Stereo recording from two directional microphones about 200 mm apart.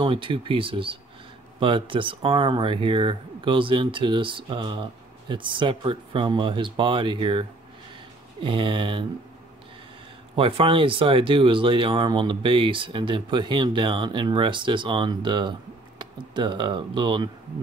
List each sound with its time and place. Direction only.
0.0 s speech: 25° right (ahead or behind)
10.3 s speech: 25° right (ahead or behind)